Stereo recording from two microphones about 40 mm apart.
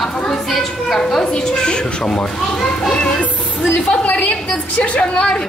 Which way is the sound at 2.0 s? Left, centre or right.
Centre.